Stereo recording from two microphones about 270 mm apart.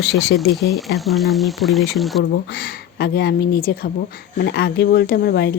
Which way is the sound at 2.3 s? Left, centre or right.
Left.